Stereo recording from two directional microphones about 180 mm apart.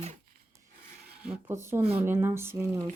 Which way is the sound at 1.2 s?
10° right (ahead or behind).